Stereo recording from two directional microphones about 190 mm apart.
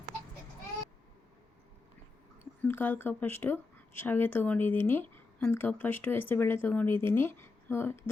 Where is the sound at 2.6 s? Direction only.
10° left (ahead or behind).